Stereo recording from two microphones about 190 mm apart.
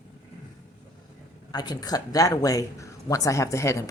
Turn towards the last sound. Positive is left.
turn(degrees=15)  # may be behind; listen again after turning